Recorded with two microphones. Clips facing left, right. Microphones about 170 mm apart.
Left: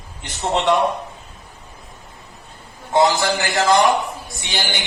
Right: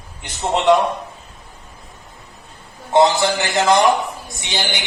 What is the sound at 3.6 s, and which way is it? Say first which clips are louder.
Speech: right 1 dB; 20° right (ahead or behind).